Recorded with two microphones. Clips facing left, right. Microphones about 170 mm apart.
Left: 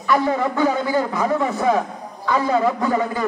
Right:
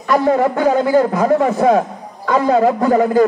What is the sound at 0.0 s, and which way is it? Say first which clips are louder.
A man's voice: right 5 dB; 50° right (ahead or behind).